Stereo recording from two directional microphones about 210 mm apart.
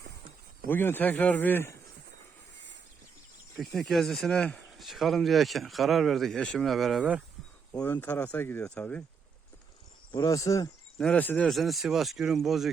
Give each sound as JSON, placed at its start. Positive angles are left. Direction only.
{"t": 0.7, "sound": "speech", "side_deg": 10}
{"t": 3.5, "sound": "speech", "side_deg": 0}
{"t": 7.8, "sound": "speech", "side_deg": 10}
{"t": 10.1, "sound": "speech", "side_deg": 15}
{"t": 10.9, "sound": "speech", "side_deg": 5}